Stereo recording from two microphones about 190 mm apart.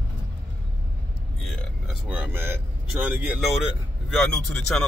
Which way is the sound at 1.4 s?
5° right (ahead or behind).